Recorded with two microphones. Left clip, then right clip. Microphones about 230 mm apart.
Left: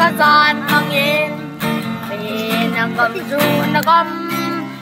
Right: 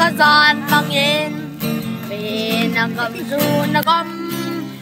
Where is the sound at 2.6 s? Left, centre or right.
Centre.